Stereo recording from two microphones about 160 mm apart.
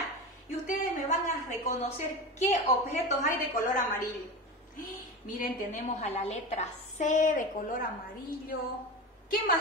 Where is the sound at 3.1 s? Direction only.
55° left (ahead or behind).